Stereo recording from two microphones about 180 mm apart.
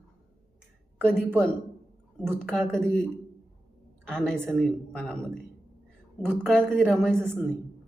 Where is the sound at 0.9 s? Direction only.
5° left (ahead or behind).